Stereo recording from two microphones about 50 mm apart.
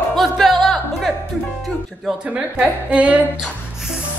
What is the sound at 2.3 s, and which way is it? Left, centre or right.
Speech, right.